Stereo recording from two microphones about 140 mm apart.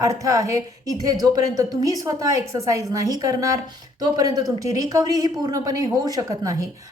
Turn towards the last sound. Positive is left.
turn(degrees=-25)  # may be behind; listen again after turning